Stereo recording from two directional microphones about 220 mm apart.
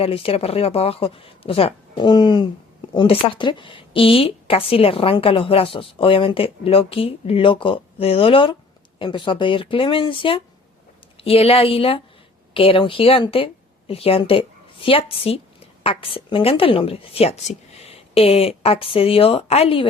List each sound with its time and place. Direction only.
0.0 s a woman's voice: 25° left (ahead or behind)